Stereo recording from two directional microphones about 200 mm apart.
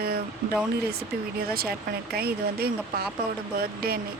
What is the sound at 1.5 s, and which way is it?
Speech, 50° right (ahead or behind).